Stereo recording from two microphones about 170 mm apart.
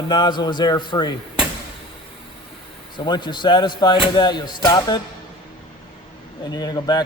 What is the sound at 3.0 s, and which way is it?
A man's voice, 25° left (ahead or behind).